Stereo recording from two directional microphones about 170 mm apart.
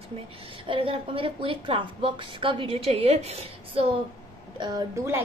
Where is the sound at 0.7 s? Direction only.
30° right (ahead or behind).